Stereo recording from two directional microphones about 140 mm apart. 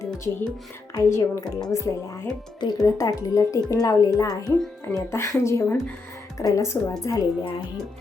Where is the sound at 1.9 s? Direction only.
25° left (ahead or behind).